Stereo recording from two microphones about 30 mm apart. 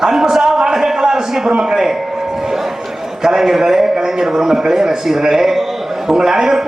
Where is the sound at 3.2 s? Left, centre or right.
Centre.